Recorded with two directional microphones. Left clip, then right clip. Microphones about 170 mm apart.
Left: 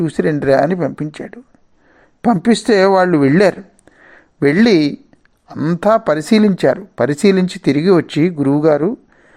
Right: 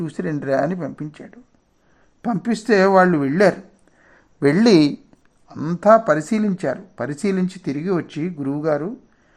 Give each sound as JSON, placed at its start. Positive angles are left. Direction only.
{"t": 0.0, "sound": "speech", "side_deg": 20}
{"t": 2.6, "sound": "speech", "side_deg": 35}
{"t": 4.0, "sound": "a sound", "side_deg": 25}
{"t": 5.5, "sound": "speech", "side_deg": 20}
{"t": 5.8, "sound": "speech", "side_deg": 40}